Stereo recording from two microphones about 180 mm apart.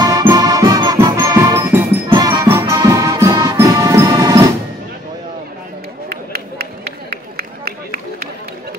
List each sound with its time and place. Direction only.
0.0 s music: 20° right (ahead or behind)
6.0 s run: 60° right (ahead or behind)